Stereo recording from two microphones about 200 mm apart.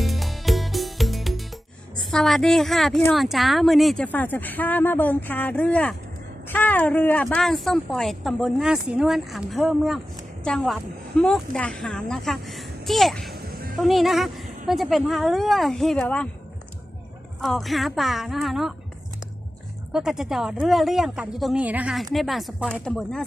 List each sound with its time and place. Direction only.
0.0 s music: centre (ahead or behind)
2.0 s speech: centre (ahead or behind)
13.3 s music: 45° right (ahead or behind)
13.7 s speech: centre (ahead or behind)
17.4 s speech: centre (ahead or behind)
19.9 s speech: centre (ahead or behind)